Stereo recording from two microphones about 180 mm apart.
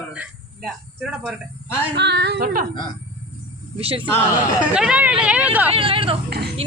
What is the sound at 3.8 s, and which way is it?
Speech, 30° right (ahead or behind).